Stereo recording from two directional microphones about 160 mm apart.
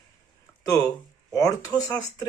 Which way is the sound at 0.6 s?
20° left (ahead or behind).